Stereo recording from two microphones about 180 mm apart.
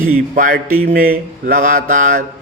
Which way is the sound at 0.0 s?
50° right (ahead or behind).